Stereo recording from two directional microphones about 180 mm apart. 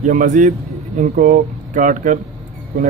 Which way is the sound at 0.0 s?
45° right (ahead or behind).